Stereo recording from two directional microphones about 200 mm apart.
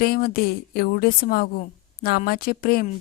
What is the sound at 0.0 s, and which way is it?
A woman's voice, 50° left (ahead or behind).